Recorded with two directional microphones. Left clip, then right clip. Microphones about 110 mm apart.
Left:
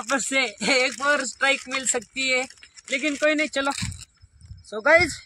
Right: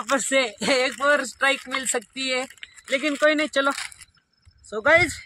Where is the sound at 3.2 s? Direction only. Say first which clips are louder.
Right 3 dB; centre (ahead or behind).